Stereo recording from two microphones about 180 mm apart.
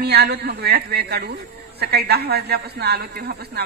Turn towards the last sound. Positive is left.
turn(degrees=-65)  # may be behind; listen again after turning